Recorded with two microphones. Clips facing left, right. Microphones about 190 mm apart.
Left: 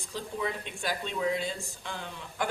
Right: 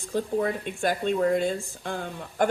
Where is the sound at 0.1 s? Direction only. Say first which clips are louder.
Right 8 dB; 50° right (ahead or behind).